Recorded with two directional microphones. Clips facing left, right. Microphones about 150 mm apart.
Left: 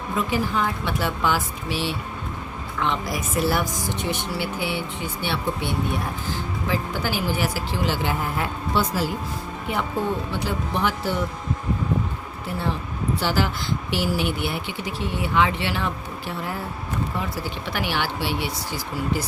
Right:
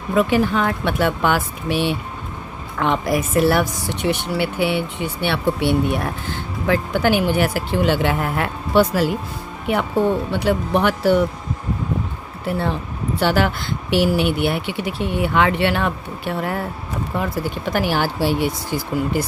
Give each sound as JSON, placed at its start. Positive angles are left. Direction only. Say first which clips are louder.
{"t": 0.1, "sound": "speech", "louder": "right 8 dB", "side_deg": -70}
{"t": 10.3, "sound": "speech", "louder": "right 8 dB", "side_deg": -60}
{"t": 12.5, "sound": "speech", "louder": "right 5 dB", "side_deg": -60}